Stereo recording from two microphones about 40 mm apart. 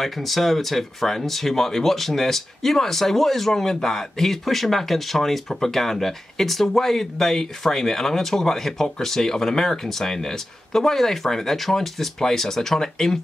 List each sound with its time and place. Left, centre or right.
0.0 s speech: centre